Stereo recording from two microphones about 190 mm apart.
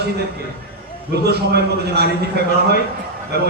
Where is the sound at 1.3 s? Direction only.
60° right (ahead or behind).